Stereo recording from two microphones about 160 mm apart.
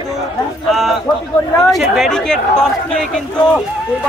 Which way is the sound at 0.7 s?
Centre (ahead or behind).